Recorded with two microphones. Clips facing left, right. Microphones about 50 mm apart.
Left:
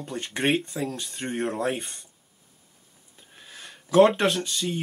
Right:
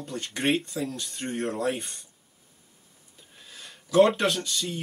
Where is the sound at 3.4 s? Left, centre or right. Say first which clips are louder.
Left 2 dB; left.